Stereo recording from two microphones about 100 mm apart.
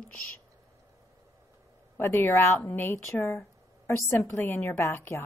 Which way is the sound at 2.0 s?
20° left (ahead or behind).